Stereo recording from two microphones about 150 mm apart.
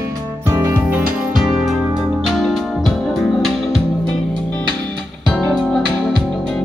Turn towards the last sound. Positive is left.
turn(degrees=0)  # may be behind; listen again after turning